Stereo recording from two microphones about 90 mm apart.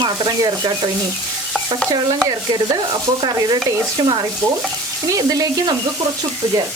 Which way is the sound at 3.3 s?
45° right (ahead or behind).